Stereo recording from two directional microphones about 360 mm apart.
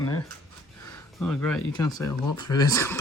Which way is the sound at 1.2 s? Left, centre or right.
Centre.